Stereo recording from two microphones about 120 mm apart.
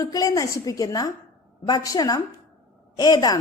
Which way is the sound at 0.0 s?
30° left (ahead or behind).